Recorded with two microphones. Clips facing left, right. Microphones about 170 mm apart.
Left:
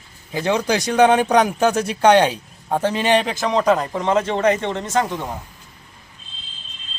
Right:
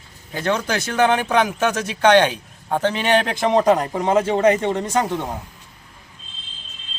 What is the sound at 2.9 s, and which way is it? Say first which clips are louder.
Speech: left 1 dB; centre (ahead or behind).